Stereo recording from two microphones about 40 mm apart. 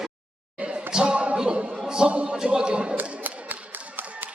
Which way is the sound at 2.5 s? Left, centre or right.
Right.